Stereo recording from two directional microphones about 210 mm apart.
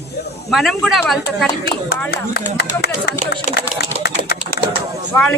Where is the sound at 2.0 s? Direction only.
50° left (ahead or behind).